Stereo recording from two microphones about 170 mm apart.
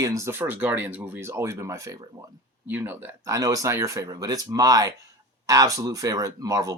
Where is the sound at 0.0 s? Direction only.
20° right (ahead or behind).